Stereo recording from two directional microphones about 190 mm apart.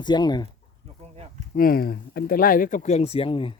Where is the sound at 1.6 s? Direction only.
50° left (ahead or behind); by 3.5 s 25° left (ahead or behind).